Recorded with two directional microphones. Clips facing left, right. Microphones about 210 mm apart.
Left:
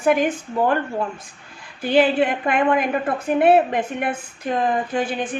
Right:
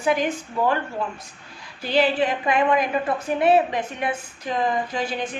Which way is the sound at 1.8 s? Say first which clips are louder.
Left 4 dB; 50° left (ahead or behind).